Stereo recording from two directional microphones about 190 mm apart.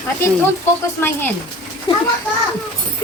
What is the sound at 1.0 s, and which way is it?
Speech, 10° left (ahead or behind).